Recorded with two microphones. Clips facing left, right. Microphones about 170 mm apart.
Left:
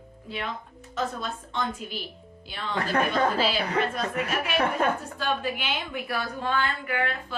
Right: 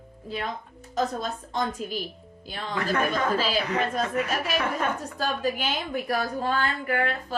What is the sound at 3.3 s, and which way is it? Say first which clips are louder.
A woman's voice: even; 40° right (ahead or behind).